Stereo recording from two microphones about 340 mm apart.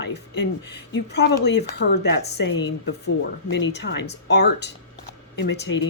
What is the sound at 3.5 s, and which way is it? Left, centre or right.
A woman's voice, left.